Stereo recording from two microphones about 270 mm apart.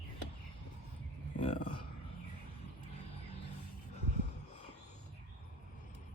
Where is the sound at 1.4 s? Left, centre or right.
Left.